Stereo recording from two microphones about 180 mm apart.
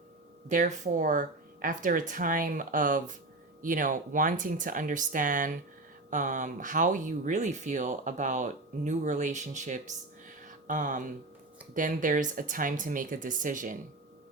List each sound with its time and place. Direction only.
0.4 s speech: 45° right (ahead or behind)